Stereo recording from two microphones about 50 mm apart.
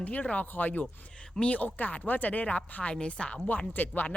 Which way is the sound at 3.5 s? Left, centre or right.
Left.